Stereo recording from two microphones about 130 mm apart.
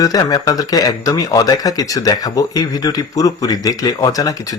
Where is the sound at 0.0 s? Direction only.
30° left (ahead or behind).